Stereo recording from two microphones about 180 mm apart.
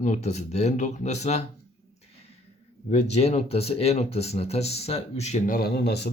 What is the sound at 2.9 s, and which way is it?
Speech, 35° left (ahead or behind).